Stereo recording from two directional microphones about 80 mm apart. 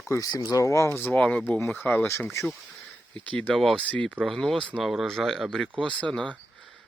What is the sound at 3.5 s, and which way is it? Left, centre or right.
Speech, centre.